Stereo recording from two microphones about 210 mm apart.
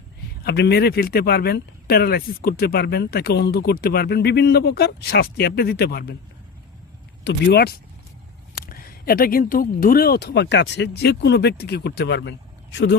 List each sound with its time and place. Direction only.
0.4 s speech: 50° left (ahead or behind)
7.3 s speech: 50° left (ahead or behind)